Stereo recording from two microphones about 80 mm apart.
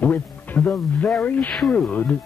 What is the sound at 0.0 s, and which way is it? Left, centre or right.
Speech, left.